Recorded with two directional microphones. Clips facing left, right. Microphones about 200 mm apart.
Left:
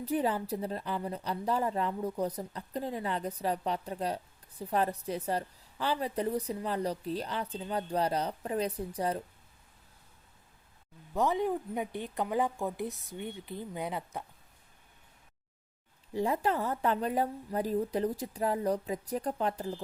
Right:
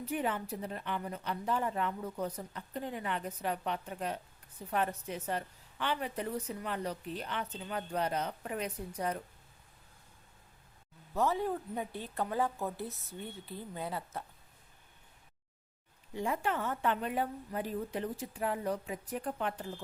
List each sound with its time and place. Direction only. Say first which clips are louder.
0.0 s a woman's voice: left 4 dB; 35° left (ahead or behind)
11.1 s a woman's voice: left 3 dB; 15° left (ahead or behind)
16.1 s a woman's voice: left 4 dB; 35° left (ahead or behind)